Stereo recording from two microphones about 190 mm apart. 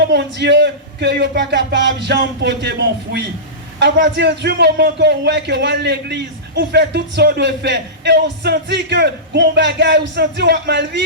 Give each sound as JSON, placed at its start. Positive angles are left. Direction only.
{"t": 0.0, "sound": "a man's voice", "side_deg": -65}